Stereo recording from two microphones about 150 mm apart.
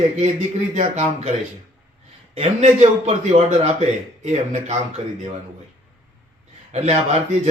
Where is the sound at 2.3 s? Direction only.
45° right (ahead or behind).